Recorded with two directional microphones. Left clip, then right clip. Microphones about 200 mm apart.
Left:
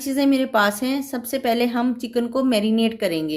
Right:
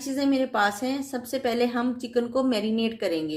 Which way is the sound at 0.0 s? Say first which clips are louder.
Left 5 dB; 40° left (ahead or behind).